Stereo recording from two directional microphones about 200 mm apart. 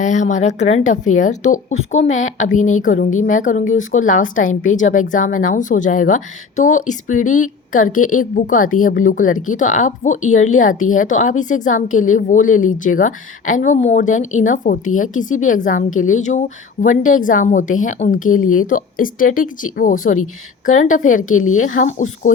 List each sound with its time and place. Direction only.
0.0 s a woman's voice: 35° left (ahead or behind)
2.0 s a woman's voice: 80° left
2.6 s a woman's voice: 40° left (ahead or behind)